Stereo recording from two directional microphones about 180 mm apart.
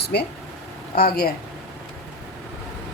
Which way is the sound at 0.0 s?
65° left (ahead or behind).